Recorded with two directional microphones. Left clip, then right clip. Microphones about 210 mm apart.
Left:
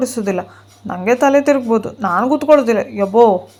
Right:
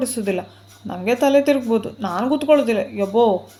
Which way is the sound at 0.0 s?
15° left (ahead or behind).